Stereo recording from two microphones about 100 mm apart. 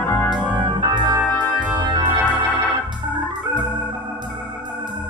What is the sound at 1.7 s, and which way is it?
Music, 45° right (ahead or behind).